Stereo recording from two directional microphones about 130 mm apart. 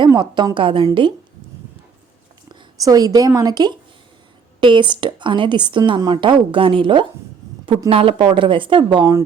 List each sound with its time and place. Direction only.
0.1 s a woman's voice: 30° right (ahead or behind)
2.5 s a woman's voice: 30° right (ahead or behind)